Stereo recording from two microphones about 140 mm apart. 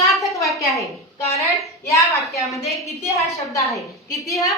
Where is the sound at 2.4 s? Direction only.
Centre (ahead or behind).